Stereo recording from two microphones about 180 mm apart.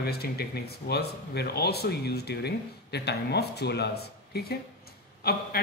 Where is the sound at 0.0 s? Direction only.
60° left (ahead or behind).